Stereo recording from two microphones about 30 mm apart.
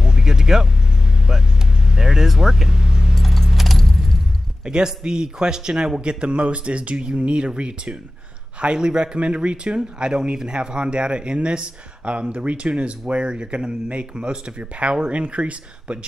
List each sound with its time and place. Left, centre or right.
0.0 s vehicle: right
3.2 s keys jangling: centre
4.6 s a man's voice: right
9.9 s a man's voice: right
13.1 s a man's voice: right
14.6 s speech: right